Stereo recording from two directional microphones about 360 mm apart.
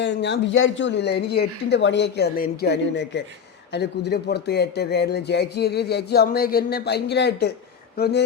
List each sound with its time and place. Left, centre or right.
0.0 s speech: left